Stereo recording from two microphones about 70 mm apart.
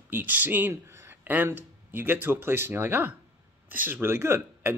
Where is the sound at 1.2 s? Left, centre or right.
Right.